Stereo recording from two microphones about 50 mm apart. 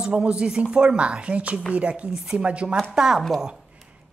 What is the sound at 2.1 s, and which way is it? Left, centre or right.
Speech, centre.